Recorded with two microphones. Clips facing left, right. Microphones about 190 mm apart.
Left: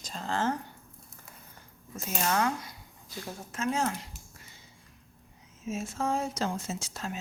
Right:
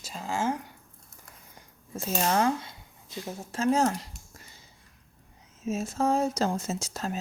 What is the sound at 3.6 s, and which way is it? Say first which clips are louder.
Speech: right 6 dB; 40° right (ahead or behind).